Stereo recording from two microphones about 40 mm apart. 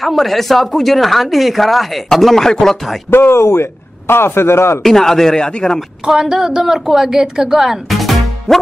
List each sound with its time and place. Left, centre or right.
0.0 s speech: centre
3.1 s a man's voice: left
4.8 s speech: centre
6.0 s a woman's voice: centre
7.9 s music: centre